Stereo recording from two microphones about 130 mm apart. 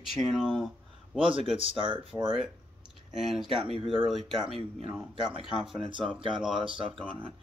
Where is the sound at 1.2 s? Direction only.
45° right (ahead or behind).